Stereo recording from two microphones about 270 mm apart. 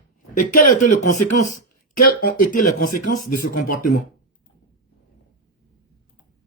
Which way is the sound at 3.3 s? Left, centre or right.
Left.